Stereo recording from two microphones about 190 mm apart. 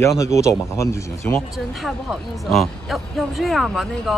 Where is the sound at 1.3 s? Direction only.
Centre (ahead or behind).